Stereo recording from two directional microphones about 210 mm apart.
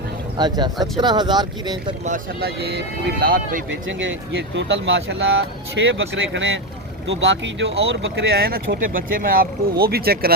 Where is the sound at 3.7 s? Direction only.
65° right (ahead or behind).